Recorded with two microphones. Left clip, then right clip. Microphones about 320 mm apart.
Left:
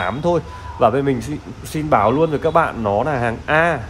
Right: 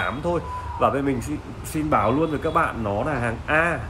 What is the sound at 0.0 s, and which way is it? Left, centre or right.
Speech, left.